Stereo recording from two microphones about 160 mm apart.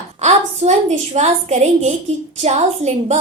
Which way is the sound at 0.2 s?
45° right (ahead or behind).